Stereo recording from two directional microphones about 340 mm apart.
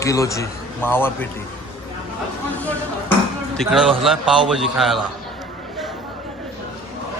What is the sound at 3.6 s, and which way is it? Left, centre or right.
A man's voice, centre.